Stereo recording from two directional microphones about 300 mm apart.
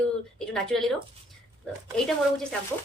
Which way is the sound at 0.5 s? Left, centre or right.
Centre.